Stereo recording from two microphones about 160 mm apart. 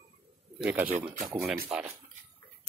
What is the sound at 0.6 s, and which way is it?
Speech, 10° right (ahead or behind).